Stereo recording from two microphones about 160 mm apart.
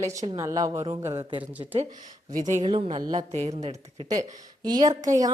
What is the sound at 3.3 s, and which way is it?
A woman's voice, 45° right (ahead or behind).